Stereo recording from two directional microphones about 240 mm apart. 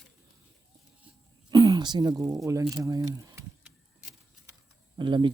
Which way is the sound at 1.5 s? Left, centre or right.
Centre.